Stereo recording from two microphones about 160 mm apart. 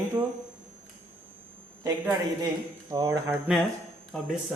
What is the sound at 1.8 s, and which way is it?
Speech, 20° right (ahead or behind).